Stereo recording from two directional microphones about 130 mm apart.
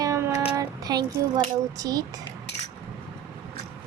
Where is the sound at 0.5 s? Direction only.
30° right (ahead or behind).